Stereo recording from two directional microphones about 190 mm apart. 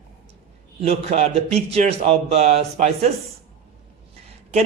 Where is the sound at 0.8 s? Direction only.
35° right (ahead or behind).